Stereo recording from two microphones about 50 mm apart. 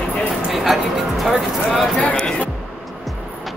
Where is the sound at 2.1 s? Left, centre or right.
Centre.